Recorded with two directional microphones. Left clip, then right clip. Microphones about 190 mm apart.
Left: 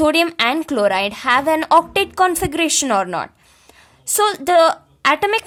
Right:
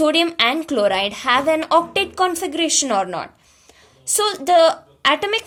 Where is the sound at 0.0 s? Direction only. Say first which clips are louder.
Left 1 dB; 30° left (ahead or behind).